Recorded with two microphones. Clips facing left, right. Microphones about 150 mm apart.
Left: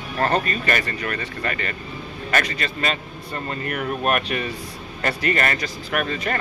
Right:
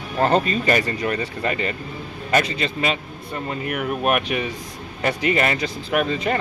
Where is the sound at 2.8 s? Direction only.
10° right (ahead or behind).